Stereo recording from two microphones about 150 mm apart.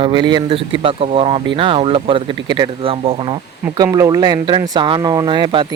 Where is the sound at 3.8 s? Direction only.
25° right (ahead or behind).